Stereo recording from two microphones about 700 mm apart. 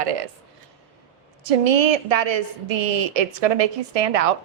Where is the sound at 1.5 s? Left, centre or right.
Right.